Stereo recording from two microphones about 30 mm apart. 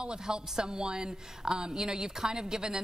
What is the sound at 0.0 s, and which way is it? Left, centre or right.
A woman's voice, right.